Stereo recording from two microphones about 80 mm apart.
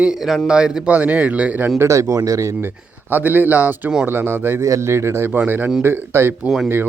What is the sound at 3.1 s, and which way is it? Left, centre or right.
Speech, right.